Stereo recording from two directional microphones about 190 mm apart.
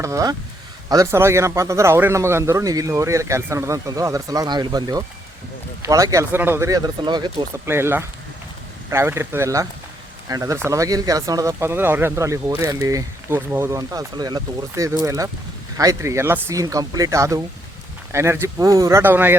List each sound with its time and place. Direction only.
0.0 s speech: 15° right (ahead or behind)
7.6 s speech: 10° right (ahead or behind)